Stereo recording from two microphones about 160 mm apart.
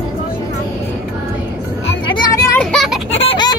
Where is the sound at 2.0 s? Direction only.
30° left (ahead or behind).